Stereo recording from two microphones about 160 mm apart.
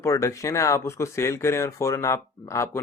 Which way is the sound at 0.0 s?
20° left (ahead or behind).